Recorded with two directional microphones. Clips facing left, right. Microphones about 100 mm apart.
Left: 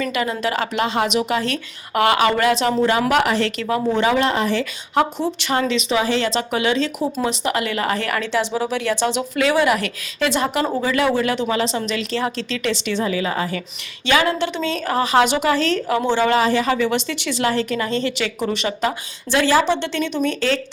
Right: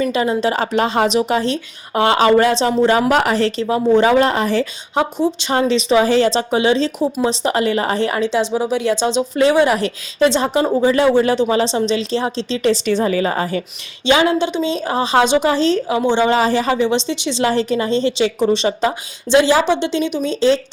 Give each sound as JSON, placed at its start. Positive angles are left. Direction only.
{"t": 0.0, "sound": "a woman's voice", "side_deg": -30}
{"t": 5.2, "sound": "a woman's voice", "side_deg": -25}
{"t": 14.0, "sound": "speech", "side_deg": -20}